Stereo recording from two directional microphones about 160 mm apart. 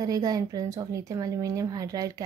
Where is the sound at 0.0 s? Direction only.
25° right (ahead or behind).